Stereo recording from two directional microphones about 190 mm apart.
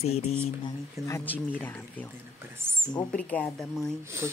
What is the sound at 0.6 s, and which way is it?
Speech, 15° left (ahead or behind).